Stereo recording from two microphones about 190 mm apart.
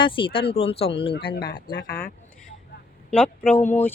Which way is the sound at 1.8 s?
60° left (ahead or behind).